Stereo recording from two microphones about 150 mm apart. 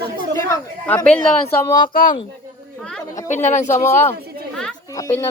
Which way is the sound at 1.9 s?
70° left (ahead or behind).